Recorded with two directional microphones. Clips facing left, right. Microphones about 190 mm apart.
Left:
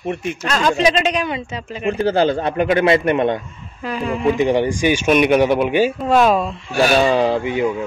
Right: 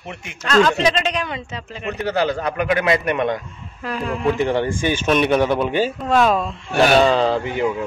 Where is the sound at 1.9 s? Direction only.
30° left (ahead or behind).